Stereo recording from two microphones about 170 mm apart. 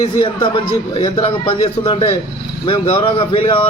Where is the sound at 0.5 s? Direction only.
30° left (ahead or behind).